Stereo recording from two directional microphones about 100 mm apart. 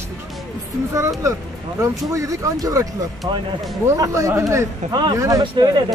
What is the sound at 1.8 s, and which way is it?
Speech, 30° right (ahead or behind).